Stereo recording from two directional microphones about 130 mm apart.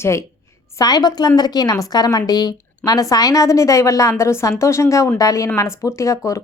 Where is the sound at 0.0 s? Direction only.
20° left (ahead or behind).